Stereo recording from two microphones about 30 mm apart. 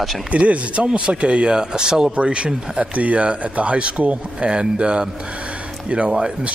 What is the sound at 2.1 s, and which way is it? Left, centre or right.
Speech, right.